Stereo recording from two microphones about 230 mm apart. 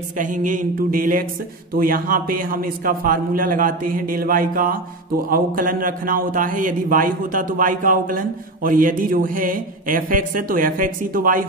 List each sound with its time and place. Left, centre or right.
0.2 s a man's voice: right